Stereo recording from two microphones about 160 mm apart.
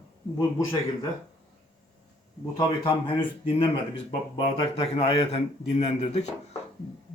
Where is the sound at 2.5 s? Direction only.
25° left (ahead or behind).